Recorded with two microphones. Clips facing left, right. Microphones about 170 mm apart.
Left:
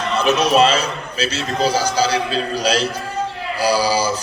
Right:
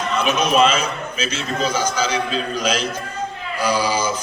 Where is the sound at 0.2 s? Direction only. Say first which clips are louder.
Left 2 dB; 35° left (ahead or behind).